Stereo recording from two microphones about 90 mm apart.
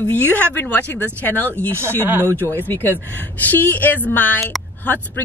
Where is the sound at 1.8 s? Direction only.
25° right (ahead or behind).